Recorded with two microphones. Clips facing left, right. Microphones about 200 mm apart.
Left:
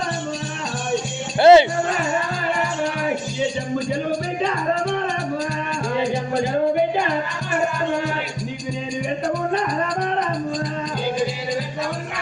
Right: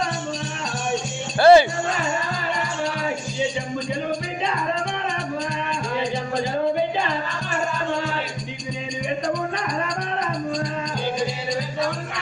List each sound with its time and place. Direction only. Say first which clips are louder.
1.4 s music: left 2 dB; 20° left (ahead or behind)